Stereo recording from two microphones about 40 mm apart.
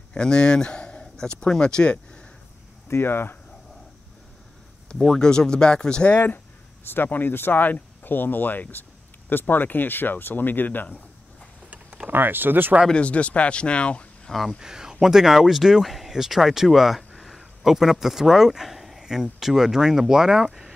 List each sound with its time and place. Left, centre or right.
0.1 s speech: left
2.9 s speech: left
4.9 s speech: centre
5.2 s speech: centre
6.8 s speech: left
11.7 s a sound: right
12.1 s speech: right
12.9 s speech: left
14.6 s speech: centre